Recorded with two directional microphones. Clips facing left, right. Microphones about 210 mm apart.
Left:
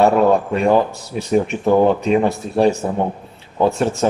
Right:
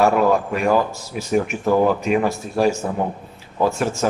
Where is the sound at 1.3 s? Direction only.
30° left (ahead or behind).